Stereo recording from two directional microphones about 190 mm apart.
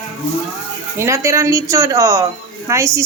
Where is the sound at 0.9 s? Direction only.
15° right (ahead or behind).